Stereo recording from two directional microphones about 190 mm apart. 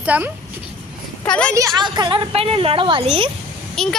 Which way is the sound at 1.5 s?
15° right (ahead or behind).